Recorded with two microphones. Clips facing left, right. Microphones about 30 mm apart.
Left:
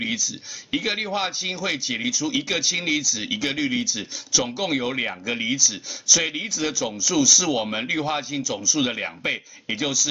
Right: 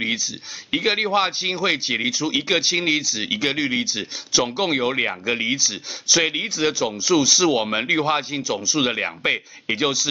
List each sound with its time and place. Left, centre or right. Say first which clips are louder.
0.7 s speech: right 4 dB; right